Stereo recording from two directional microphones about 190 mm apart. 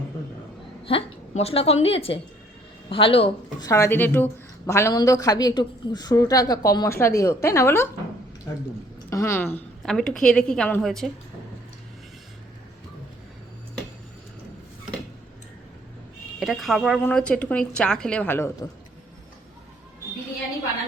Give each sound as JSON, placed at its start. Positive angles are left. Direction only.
{"t": 0.9, "sound": "a woman's voice", "side_deg": 30}
{"t": 3.7, "sound": "a woman's voice", "side_deg": 15}
{"t": 9.0, "sound": "a woman's voice", "side_deg": 15}
{"t": 16.4, "sound": "a woman's voice", "side_deg": 0}